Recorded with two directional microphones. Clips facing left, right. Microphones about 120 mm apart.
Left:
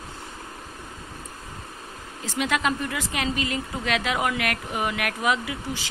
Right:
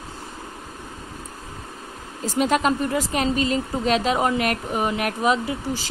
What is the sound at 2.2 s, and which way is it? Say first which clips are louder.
Speech: right 5 dB; 40° right (ahead or behind).